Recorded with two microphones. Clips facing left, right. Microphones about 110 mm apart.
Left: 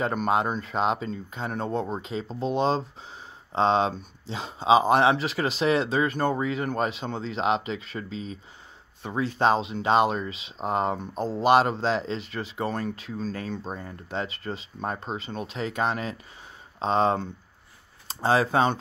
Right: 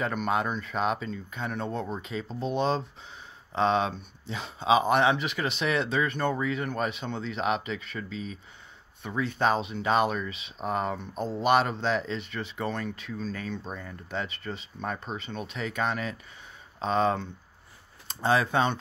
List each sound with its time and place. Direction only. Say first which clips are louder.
0.0 s speech: left 3 dB; 35° left (ahead or behind)